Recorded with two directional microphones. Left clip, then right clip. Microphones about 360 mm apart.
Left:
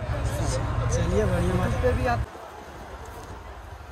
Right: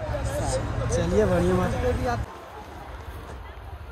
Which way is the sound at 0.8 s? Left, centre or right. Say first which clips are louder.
Right 4 dB; centre.